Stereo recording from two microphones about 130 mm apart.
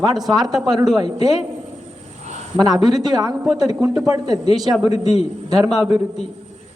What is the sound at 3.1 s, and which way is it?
A woman's voice, 30° right (ahead or behind).